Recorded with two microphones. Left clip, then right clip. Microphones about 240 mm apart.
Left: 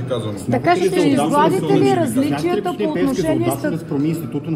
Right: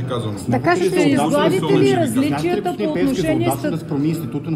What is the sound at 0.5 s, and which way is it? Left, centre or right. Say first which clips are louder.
Speech: left 1 dB; right.